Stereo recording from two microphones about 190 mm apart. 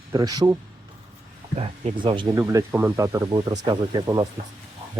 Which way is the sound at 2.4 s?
15° right (ahead or behind).